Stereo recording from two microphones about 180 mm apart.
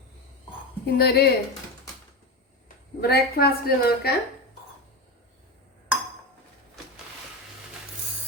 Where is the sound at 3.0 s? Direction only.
60° left (ahead or behind).